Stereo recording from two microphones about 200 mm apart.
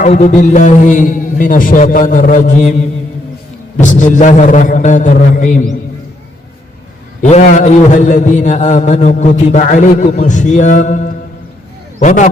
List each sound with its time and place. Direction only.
0.0 s a man's voice: 40° left (ahead or behind)
7.2 s a man's voice: 35° left (ahead or behind)